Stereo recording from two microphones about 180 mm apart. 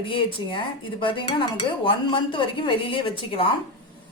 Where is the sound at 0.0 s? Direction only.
30° left (ahead or behind).